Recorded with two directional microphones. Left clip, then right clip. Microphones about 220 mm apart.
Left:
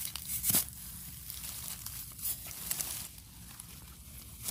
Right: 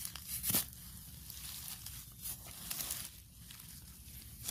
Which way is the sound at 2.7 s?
15° left (ahead or behind).